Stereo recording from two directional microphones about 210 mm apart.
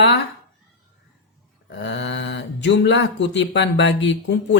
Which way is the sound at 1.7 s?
60° left (ahead or behind).